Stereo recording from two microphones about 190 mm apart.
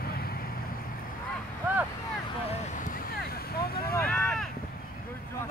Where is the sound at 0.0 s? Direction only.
55° left (ahead or behind).